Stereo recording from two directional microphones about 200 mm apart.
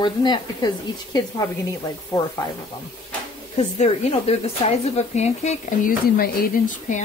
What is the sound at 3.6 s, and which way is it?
Speech, 30° left (ahead or behind).